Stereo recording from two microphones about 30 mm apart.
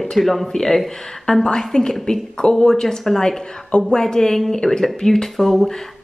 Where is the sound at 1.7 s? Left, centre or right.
Left.